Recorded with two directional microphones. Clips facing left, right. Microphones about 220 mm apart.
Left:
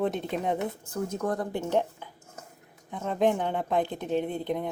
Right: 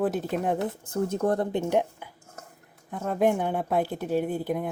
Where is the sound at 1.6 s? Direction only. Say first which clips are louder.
Right 2 dB; 10° right (ahead or behind).